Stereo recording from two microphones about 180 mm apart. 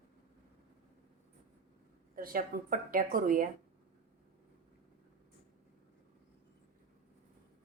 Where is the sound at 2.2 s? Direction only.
50° right (ahead or behind).